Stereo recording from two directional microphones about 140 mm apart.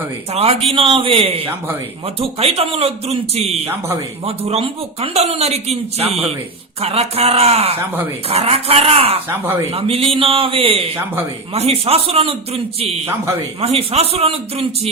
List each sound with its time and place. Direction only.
0.3 s a man's voice: 45° right (ahead or behind)
13.6 s speech: 45° right (ahead or behind)